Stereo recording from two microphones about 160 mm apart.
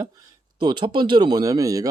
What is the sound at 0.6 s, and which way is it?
Speech, 30° right (ahead or behind).